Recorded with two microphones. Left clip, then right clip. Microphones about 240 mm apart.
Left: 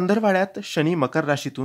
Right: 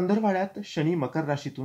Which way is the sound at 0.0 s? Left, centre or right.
Left.